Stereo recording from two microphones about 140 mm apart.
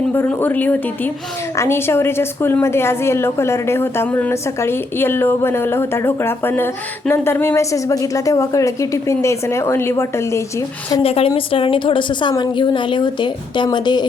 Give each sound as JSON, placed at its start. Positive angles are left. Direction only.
{"t": 0.1, "sound": "a woman's voice", "side_deg": 15}
{"t": 11.0, "sound": "a woman's voice", "side_deg": 45}